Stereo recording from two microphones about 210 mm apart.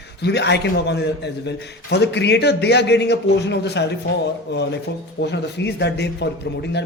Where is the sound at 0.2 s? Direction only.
55° left (ahead or behind).